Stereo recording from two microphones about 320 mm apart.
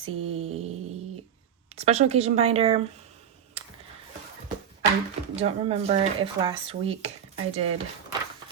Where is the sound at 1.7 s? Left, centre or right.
Centre.